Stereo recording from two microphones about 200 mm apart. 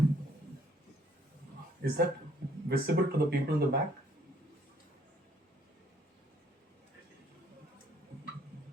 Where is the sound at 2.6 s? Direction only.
55° right (ahead or behind).